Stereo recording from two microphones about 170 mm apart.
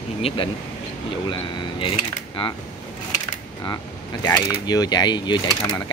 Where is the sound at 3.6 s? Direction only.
25° left (ahead or behind).